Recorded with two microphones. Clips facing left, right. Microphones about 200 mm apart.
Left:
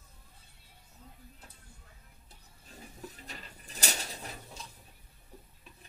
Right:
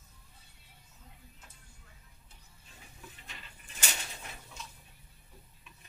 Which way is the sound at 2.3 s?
40° left (ahead or behind).